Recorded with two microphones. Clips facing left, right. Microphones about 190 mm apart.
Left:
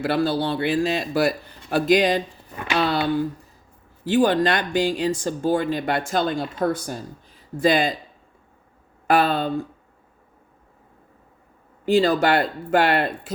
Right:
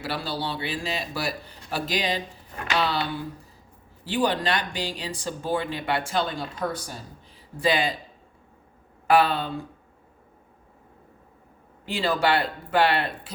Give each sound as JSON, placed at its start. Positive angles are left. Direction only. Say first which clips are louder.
{"t": 0.0, "sound": "speech", "louder": "left 9 dB", "side_deg": 50}
{"t": 9.0, "sound": "speech", "louder": "left 1 dB", "side_deg": 45}
{"t": 11.9, "sound": "speech", "louder": "left 6 dB", "side_deg": 45}